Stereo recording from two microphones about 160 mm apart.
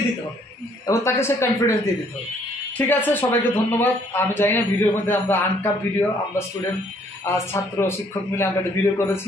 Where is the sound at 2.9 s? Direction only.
10° left (ahead or behind).